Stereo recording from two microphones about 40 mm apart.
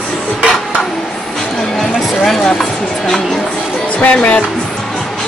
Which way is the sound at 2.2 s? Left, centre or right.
Centre.